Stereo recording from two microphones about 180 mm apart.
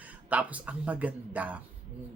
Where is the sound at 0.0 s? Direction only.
10° right (ahead or behind).